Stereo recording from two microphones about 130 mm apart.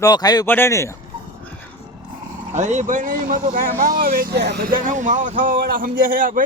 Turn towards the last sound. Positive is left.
turn(degrees=-90)